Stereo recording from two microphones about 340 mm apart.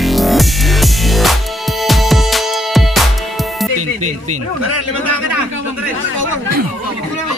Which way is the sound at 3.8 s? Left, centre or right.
Right.